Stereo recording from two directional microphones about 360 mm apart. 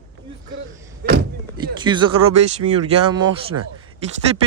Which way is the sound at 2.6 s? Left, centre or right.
Right.